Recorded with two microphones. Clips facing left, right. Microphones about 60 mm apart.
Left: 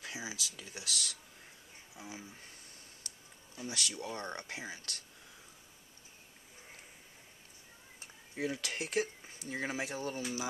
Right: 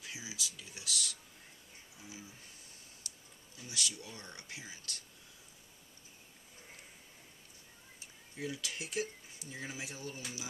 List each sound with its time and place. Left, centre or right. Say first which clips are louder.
0.0 s speech: left 3 dB; left
3.5 s speech: left 3 dB; left
8.0 s speech: left 5 dB; left